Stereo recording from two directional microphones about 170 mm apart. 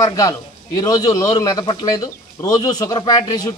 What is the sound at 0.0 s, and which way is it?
A man's voice, 20° left (ahead or behind).